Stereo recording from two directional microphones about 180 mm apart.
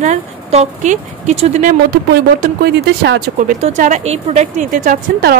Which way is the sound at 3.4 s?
45° right (ahead or behind).